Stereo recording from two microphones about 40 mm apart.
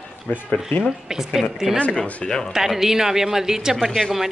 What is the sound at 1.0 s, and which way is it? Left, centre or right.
Speech, centre.